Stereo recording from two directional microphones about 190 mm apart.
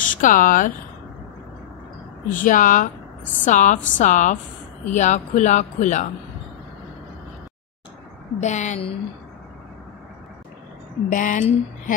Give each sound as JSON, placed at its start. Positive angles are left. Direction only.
{"t": 0.0, "sound": "speech", "side_deg": 45}
{"t": 2.3, "sound": "speech", "side_deg": 45}
{"t": 8.4, "sound": "speech", "side_deg": 40}
{"t": 11.1, "sound": "speech", "side_deg": 45}